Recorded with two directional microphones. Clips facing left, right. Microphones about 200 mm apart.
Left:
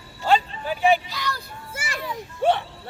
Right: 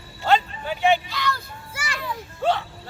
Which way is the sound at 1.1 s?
10° left (ahead or behind).